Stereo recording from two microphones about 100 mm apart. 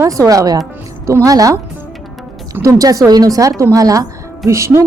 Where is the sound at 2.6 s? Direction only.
35° right (ahead or behind).